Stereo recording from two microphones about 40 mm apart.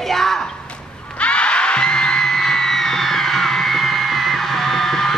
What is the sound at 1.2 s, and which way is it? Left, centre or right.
Music, left.